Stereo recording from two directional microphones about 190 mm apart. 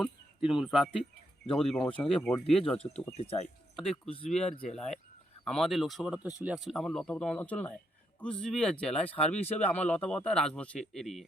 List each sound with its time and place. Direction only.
0.0 s speech: 5° right (ahead or behind)
2.7 s speech: 35° left (ahead or behind)
3.8 s a man's voice: centre (ahead or behind)